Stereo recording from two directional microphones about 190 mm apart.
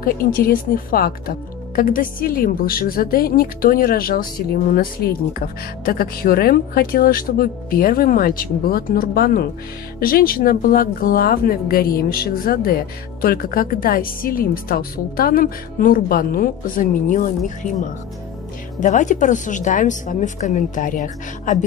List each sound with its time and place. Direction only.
0.0 s a woman's voice: 50° left (ahead or behind)
18.8 s a woman's voice: 40° left (ahead or behind)